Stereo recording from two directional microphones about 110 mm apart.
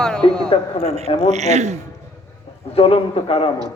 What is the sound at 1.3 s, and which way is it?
Speech, 90° right.